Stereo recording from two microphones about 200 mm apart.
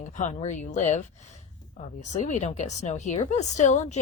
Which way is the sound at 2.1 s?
35° left (ahead or behind).